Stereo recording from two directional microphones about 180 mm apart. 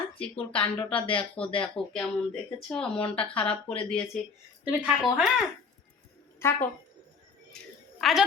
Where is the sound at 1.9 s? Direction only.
Centre (ahead or behind).